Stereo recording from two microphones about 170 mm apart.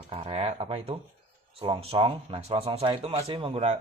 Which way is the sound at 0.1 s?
35° right (ahead or behind).